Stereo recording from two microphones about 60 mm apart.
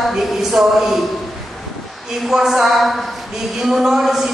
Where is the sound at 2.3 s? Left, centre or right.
Centre.